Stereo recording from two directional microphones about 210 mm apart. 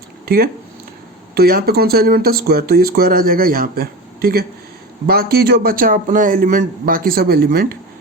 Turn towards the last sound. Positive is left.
turn(degrees=-45)  # may be behind; listen again after turning